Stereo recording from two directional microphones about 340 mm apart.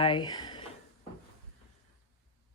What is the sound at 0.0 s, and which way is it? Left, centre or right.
Speech, centre.